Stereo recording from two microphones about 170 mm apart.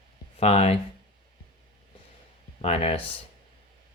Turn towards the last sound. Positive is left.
turn(degrees=35)  # may be behind; listen again after turning